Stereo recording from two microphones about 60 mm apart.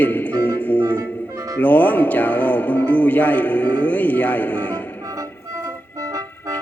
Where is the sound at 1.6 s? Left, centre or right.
Left.